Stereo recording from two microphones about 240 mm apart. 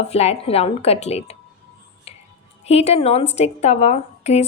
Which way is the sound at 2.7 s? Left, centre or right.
Left.